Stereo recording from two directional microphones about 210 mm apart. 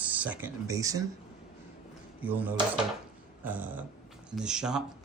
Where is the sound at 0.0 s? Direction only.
5° right (ahead or behind).